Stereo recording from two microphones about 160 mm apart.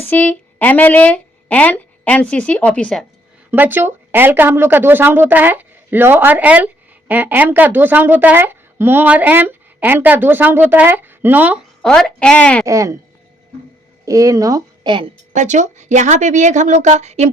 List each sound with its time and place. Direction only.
0.0 s speech: 10° left (ahead or behind)
3.5 s speech: 10° right (ahead or behind)
11.8 s a woman's voice: 5° left (ahead or behind)
12.6 s speech: 20° right (ahead or behind)
14.0 s a woman's voice: 20° right (ahead or behind)
15.4 s a woman's voice: 50° right (ahead or behind)